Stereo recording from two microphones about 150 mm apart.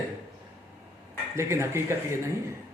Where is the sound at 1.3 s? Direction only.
15° right (ahead or behind).